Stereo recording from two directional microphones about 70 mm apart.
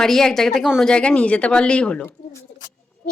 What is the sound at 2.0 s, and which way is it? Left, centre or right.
Speech, left.